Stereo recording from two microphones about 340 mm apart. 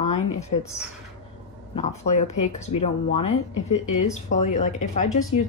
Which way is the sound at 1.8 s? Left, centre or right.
Centre.